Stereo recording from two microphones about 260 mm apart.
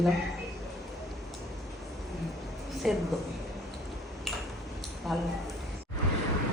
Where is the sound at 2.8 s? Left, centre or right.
Centre.